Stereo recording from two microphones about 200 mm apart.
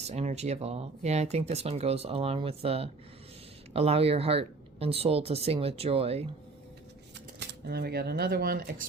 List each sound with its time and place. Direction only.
0.1 s speech: 35° right (ahead or behind)
7.3 s speech: 55° right (ahead or behind)